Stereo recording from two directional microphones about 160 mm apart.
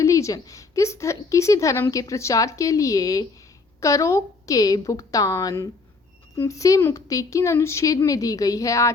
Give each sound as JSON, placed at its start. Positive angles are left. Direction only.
{"t": 0.0, "sound": "a woman's voice", "side_deg": 20}